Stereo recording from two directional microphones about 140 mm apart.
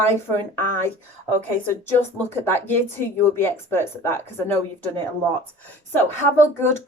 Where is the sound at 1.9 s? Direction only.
15° left (ahead or behind).